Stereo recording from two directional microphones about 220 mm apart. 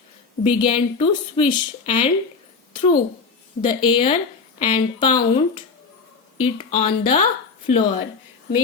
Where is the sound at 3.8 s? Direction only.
25° left (ahead or behind).